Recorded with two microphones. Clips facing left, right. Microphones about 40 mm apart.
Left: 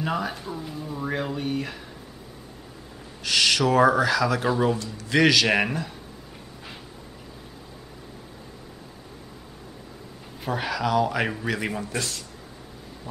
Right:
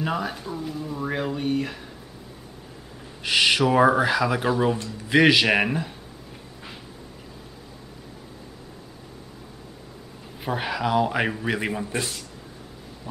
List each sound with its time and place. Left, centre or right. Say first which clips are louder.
0.0 s speech: even; centre
3.2 s speech: right 2 dB; right
5.6 s speech: right 1 dB; centre
10.4 s speech: even; centre